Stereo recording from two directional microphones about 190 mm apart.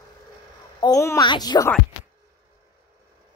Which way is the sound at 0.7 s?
20° left (ahead or behind).